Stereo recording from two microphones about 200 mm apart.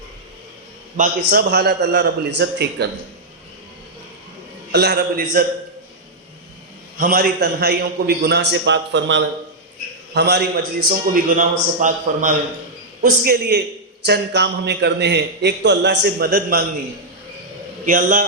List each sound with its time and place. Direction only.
0.9 s a man's voice: 45° right (ahead or behind)
4.7 s a man's voice: 55° right (ahead or behind)
7.0 s a man's voice: 45° right (ahead or behind)
13.0 s a man's voice: 50° right (ahead or behind)
17.8 s a man's voice: 45° right (ahead or behind)